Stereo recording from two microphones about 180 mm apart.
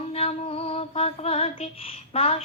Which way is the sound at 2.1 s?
35° left (ahead or behind).